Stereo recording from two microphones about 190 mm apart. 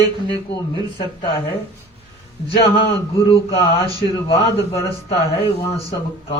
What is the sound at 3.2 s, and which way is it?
A man's voice, 30° left (ahead or behind).